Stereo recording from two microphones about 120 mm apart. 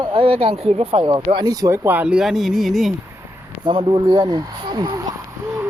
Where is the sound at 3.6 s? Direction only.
45° right (ahead or behind).